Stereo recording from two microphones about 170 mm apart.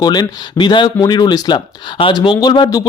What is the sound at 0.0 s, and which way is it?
Speech, 25° left (ahead or behind).